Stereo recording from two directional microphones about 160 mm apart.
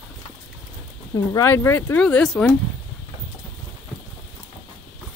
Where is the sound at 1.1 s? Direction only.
20° left (ahead or behind).